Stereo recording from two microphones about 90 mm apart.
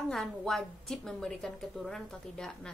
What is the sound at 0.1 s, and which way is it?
A woman's voice, centre (ahead or behind).